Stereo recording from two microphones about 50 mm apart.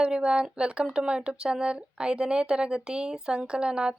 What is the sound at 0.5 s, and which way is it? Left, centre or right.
Speech, right.